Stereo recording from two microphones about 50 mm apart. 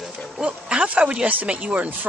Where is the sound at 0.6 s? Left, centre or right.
Right.